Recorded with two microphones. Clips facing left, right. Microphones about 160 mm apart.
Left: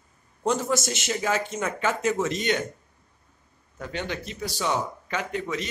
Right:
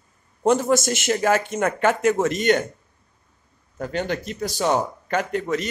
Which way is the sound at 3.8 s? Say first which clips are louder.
Right 6 dB; 45° right (ahead or behind).